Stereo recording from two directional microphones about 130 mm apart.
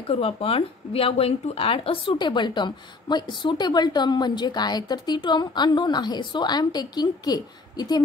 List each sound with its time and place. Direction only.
0.0 s speech: 45° left (ahead or behind); by 8.0 s 30° left (ahead or behind)